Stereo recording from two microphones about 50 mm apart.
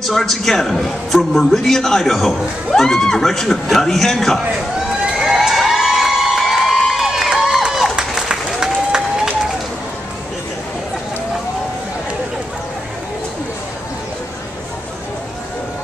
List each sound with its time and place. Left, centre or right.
0.0 s a man's voice: centre
5.0 s cheering: centre
6.9 s crowd: centre
7.7 s a sound: centre
8.3 s applause: centre